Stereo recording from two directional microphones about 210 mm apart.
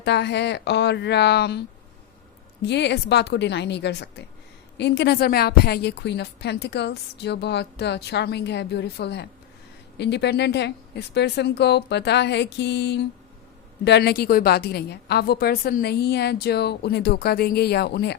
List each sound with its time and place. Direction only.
0.0 s a woman's voice: 55° left (ahead or behind)